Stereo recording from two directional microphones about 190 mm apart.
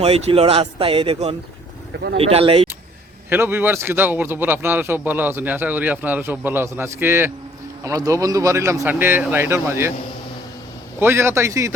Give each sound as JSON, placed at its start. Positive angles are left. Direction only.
{"t": 0.0, "sound": "a man's voice", "side_deg": -30}
{"t": 3.2, "sound": "a man's voice", "side_deg": -10}
{"t": 11.0, "sound": "a man's voice", "side_deg": -10}